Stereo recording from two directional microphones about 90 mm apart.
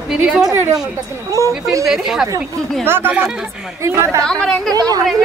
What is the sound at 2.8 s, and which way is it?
Speech, 25° right (ahead or behind).